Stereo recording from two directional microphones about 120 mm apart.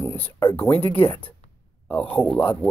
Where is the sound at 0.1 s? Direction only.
50° left (ahead or behind).